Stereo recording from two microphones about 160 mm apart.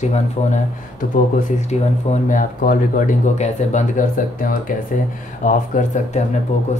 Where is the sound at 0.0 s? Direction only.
45° left (ahead or behind).